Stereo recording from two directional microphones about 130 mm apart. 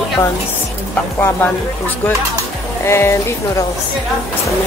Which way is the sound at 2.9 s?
20° left (ahead or behind).